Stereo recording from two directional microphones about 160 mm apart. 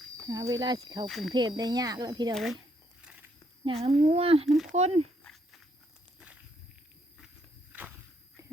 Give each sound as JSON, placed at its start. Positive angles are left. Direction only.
{"t": 0.3, "sound": "speech", "side_deg": -20}
{"t": 1.0, "sound": "speech", "side_deg": 0}
{"t": 1.3, "sound": "speech", "side_deg": -25}
{"t": 2.3, "sound": "speech", "side_deg": 0}
{"t": 3.0, "sound": "walk", "side_deg": -5}
{"t": 3.6, "sound": "speech", "side_deg": -40}
{"t": 5.2, "sound": "walk", "side_deg": 0}
{"t": 7.7, "sound": "walk", "side_deg": -10}